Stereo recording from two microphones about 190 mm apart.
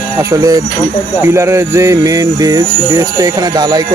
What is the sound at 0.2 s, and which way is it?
Speech, 15° right (ahead or behind).